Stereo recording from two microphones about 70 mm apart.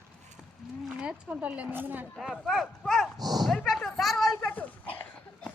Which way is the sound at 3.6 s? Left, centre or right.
Centre.